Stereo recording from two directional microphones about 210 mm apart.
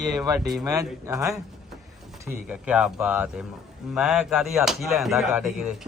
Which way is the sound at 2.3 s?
5° right (ahead or behind).